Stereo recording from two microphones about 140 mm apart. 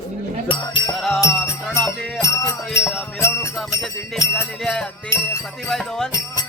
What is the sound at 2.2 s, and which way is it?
Music, 20° left (ahead or behind).